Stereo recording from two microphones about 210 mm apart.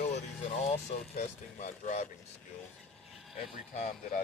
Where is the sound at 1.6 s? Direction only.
35° left (ahead or behind).